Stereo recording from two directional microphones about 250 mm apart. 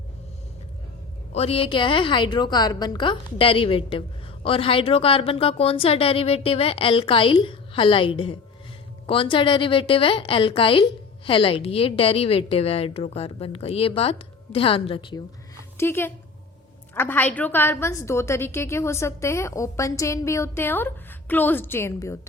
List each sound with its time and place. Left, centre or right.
1.3 s a woman's voice: left
15.8 s a woman's voice: centre